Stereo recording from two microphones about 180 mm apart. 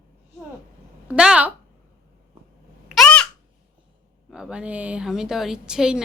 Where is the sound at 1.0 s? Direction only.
5° right (ahead or behind).